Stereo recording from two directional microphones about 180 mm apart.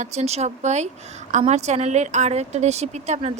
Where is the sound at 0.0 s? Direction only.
40° right (ahead or behind).